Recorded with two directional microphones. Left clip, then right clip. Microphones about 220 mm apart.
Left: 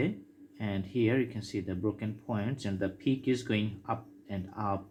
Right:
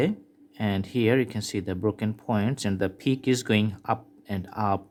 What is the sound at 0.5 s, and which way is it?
Speech, 50° right (ahead or behind).